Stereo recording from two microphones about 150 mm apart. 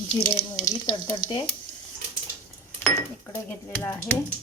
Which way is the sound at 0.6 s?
25° left (ahead or behind).